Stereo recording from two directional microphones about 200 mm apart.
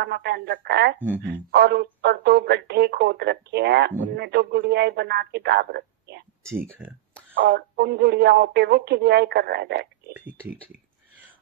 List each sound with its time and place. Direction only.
0.0 s speech: 55° right (ahead or behind)
0.9 s speech: 10° right (ahead or behind)
1.5 s speech: 55° right (ahead or behind)
7.5 s speech: 55° right (ahead or behind)